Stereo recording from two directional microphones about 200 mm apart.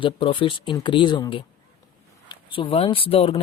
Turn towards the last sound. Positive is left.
turn(degrees=30)  # may be behind; listen again after turning